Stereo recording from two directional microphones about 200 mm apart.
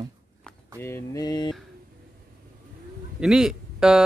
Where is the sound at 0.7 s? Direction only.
10° left (ahead or behind).